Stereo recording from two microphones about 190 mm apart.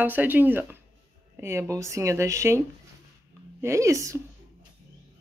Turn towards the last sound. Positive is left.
turn(degrees=-15)  # may be behind; listen again after turning